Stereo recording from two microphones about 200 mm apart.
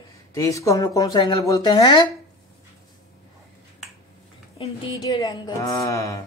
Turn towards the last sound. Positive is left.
turn(degrees=15)  # may be behind; listen again after turning